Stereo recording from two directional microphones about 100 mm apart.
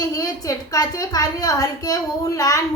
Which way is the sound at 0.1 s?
35° left (ahead or behind).